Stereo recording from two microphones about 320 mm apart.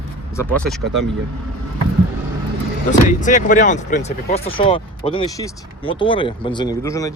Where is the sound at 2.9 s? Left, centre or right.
Left.